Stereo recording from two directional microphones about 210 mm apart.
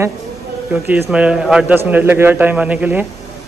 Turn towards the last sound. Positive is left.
turn(degrees=-5)  # may be behind; listen again after turning